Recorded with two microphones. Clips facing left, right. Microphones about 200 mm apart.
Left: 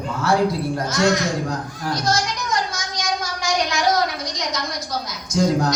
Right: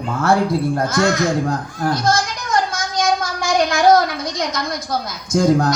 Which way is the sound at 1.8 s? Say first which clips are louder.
Right 4 dB; 55° right (ahead or behind).